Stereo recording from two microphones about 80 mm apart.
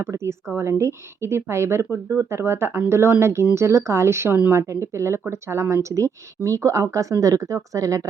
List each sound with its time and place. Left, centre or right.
0.0 s speech: right
4.3 s speech: centre
4.5 s speech: right